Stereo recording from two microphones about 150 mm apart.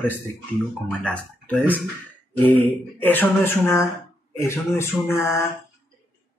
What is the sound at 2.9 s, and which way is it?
Speech, 10° left (ahead or behind).